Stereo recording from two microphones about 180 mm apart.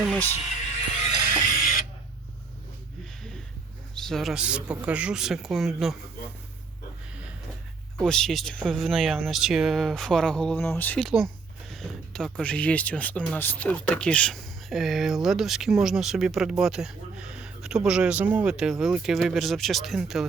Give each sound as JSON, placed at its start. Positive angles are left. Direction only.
{"t": 0.9, "sound": "music", "side_deg": 45}
{"t": 3.9, "sound": "speech", "side_deg": 0}
{"t": 7.9, "sound": "speech", "side_deg": 5}